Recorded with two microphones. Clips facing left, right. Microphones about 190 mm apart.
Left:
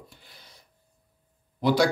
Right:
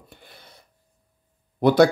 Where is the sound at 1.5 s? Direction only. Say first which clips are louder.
Right 6 dB; 55° right (ahead or behind).